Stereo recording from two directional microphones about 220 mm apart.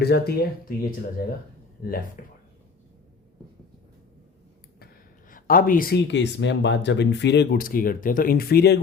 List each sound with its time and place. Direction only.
0.0 s speech: 45° left (ahead or behind)
5.3 s speech: 40° left (ahead or behind)